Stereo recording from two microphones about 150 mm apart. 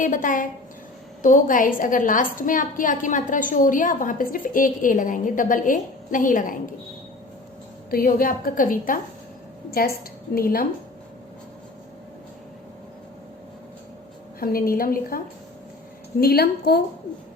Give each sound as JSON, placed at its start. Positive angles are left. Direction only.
{"t": 0.0, "sound": "a woman's voice", "side_deg": 60}
{"t": 7.9, "sound": "a woman's voice", "side_deg": 75}
{"t": 10.3, "sound": "a woman's voice", "side_deg": 75}
{"t": 14.3, "sound": "a woman's voice", "side_deg": 85}
{"t": 16.2, "sound": "a woman's voice", "side_deg": 90}